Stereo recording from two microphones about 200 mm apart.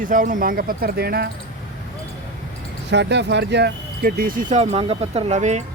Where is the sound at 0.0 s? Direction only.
40° right (ahead or behind).